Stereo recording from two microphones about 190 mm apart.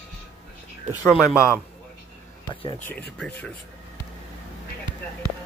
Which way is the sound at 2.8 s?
10° left (ahead or behind).